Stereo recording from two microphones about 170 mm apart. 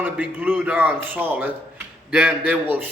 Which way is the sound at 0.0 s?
10° right (ahead or behind).